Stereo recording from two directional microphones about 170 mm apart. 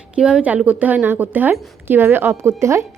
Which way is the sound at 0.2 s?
5° right (ahead or behind).